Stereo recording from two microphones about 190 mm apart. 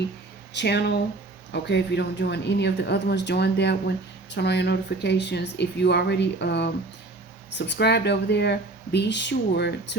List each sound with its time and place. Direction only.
0.5 s speech: 60° left (ahead or behind)